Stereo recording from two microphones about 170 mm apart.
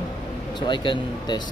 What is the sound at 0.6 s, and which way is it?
Speech, 30° left (ahead or behind).